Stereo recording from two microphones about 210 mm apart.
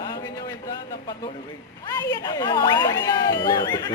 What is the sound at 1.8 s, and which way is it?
Speech, 20° left (ahead or behind).